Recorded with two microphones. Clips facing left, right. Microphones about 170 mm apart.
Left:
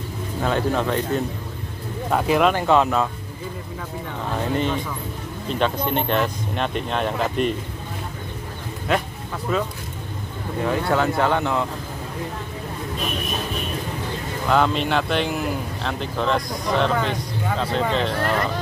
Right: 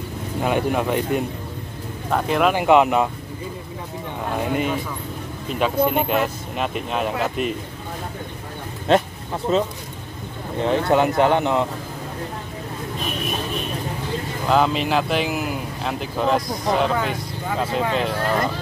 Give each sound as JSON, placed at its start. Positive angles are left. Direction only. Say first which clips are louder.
{"t": 0.4, "sound": "speech", "louder": "right 1 dB", "side_deg": -15}
{"t": 2.0, "sound": "speech", "louder": "left 1 dB", "side_deg": 5}
{"t": 2.4, "sound": "speech", "louder": "right 6 dB", "side_deg": -15}
{"t": 4.4, "sound": "speech", "louder": "even", "side_deg": -10}
{"t": 8.8, "sound": "speech", "louder": "right 6 dB", "side_deg": -25}
{"t": 14.5, "sound": "speech", "louder": "right 1 dB", "side_deg": -5}